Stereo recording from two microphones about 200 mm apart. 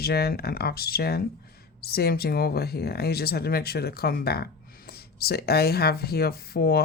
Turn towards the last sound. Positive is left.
turn(degrees=50)  # may be behind; listen again after turning